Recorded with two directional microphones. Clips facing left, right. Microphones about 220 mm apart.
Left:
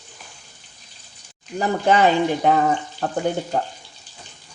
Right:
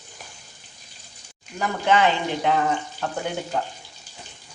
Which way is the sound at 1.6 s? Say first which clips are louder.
Left 3 dB; 40° left (ahead or behind).